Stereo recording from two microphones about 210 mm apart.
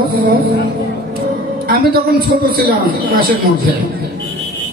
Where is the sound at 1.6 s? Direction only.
45° right (ahead or behind).